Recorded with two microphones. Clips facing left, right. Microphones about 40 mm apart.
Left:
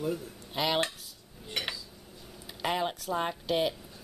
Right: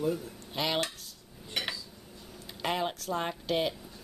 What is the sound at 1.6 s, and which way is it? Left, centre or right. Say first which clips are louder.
Dishes: even; centre.